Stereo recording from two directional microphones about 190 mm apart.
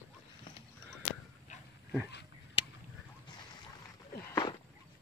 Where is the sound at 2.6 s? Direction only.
30° left (ahead or behind).